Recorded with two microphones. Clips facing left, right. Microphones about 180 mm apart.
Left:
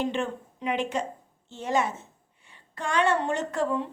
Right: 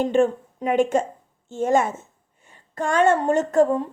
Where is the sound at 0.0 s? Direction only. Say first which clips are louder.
Right 9 dB; 45° right (ahead or behind).